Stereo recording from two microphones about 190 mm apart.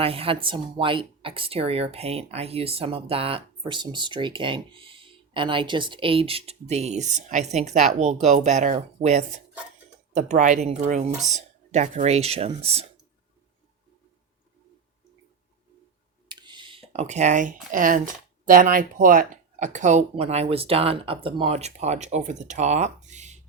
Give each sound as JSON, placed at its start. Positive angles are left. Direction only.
{"t": 0.0, "sound": "speech", "side_deg": -30}
{"t": 16.3, "sound": "speech", "side_deg": -25}